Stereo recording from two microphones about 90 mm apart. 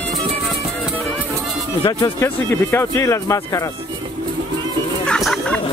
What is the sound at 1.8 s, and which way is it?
Speech, 55° left (ahead or behind).